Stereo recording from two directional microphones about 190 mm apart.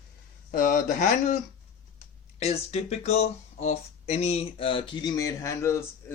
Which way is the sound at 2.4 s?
35° left (ahead or behind).